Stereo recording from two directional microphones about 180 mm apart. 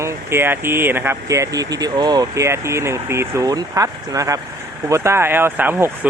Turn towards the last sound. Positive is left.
turn(degrees=-10)  # may be behind; listen again after turning